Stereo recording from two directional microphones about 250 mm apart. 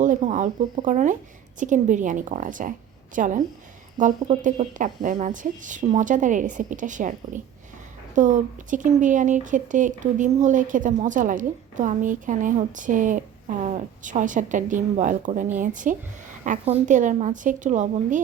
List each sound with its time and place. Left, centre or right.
0.0 s a woman's voice: right